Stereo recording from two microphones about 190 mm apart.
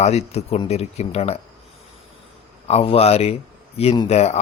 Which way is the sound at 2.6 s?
30° left (ahead or behind).